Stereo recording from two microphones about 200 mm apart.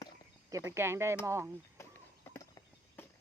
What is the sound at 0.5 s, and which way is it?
Speech, 15° right (ahead or behind).